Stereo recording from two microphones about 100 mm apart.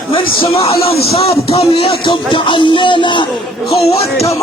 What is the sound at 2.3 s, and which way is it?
Speech, 55° left (ahead or behind).